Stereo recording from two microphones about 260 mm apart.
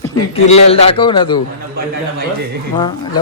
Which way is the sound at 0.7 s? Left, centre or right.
Left.